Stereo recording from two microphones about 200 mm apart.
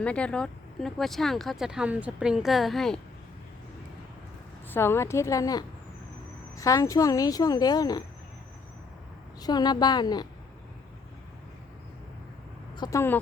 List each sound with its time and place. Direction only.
0.0 s speech: 5° left (ahead or behind)
4.7 s a woman's voice: 10° left (ahead or behind)
9.4 s a woman's voice: 20° left (ahead or behind)
12.7 s speech: 20° left (ahead or behind)